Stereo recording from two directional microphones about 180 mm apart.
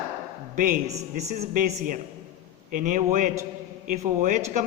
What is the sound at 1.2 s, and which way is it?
Speech, 45° right (ahead or behind).